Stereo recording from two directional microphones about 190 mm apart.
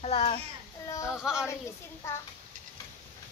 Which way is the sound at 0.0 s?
30° left (ahead or behind).